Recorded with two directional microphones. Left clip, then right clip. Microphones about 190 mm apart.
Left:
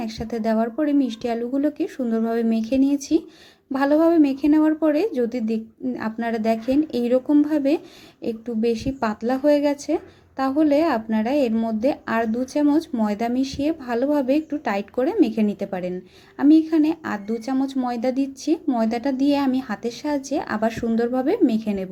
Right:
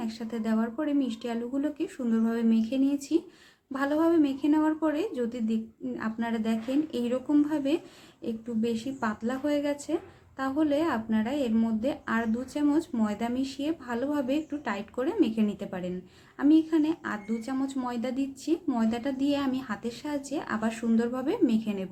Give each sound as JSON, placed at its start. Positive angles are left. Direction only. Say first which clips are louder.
{"t": 0.0, "sound": "speech", "louder": "left 9 dB", "side_deg": 30}